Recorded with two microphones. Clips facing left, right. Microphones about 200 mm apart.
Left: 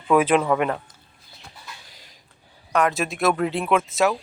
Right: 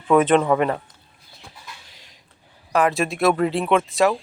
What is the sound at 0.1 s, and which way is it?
Speech, 5° left (ahead or behind).